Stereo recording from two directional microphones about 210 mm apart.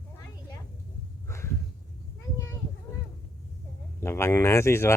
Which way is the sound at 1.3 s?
10° left (ahead or behind).